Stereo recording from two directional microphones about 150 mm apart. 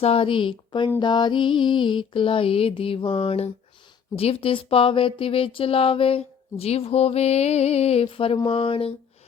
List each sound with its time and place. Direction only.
0.0 s speech: 40° left (ahead or behind)